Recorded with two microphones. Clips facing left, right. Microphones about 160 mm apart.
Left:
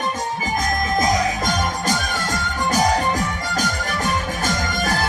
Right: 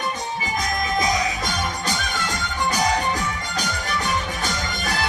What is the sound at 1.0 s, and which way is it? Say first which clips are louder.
Music: left 4 dB; 45° left (ahead or behind).